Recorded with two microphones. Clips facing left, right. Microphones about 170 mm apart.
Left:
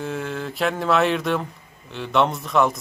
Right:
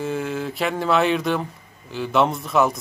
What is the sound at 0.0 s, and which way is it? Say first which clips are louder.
Speech: right 3 dB; centre (ahead or behind).